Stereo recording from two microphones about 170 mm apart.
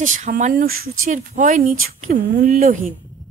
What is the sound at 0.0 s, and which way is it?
Speech, 50° right (ahead or behind).